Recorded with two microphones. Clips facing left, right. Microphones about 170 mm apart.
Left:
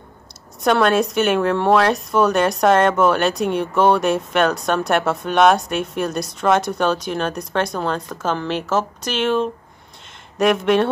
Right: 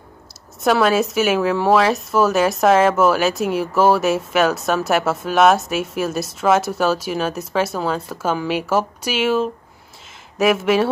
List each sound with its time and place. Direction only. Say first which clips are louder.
0.6 s speech: even; 5° right (ahead or behind)